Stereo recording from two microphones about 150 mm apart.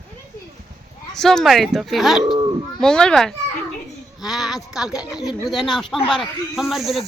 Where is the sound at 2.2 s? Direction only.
30° right (ahead or behind).